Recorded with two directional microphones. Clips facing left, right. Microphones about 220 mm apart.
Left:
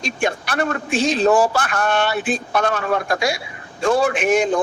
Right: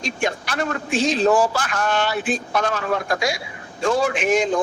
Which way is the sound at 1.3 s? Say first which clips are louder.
Left 2 dB; 60° left (ahead or behind).